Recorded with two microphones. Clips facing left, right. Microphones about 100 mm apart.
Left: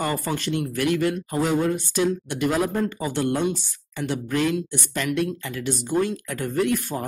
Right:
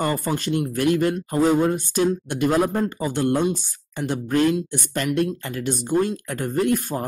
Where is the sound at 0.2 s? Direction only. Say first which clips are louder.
Right 2 dB; 45° right (ahead or behind).